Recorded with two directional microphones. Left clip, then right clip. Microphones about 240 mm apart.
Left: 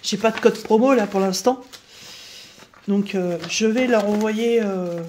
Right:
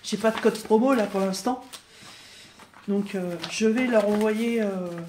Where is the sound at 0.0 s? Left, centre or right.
Left.